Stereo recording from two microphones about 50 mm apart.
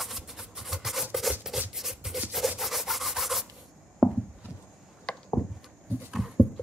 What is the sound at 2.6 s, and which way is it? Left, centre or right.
Rub, centre.